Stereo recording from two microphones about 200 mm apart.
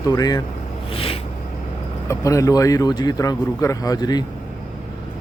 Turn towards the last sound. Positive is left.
turn(degrees=20)  # may be behind; listen again after turning